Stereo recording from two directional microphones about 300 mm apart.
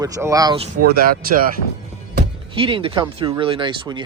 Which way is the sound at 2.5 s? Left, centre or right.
Centre.